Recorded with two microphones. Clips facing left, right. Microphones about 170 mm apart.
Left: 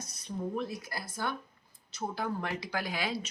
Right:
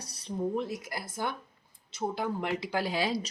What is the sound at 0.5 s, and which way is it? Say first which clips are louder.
A woman's voice: right 3 dB; 25° right (ahead or behind).